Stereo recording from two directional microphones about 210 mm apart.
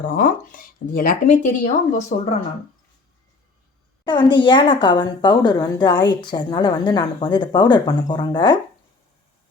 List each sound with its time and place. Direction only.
0.0 s speech: 40° left (ahead or behind)
4.0 s a woman's voice: 20° left (ahead or behind)